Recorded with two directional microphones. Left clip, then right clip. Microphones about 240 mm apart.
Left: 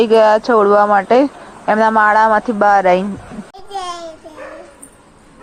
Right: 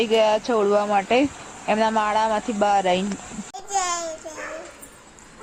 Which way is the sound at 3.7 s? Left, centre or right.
Centre.